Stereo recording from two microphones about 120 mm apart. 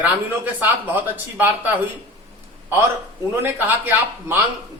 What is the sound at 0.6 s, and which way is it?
A man's voice, 15° right (ahead or behind).